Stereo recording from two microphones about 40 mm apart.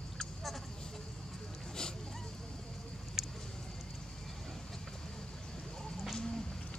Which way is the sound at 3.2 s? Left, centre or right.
Centre.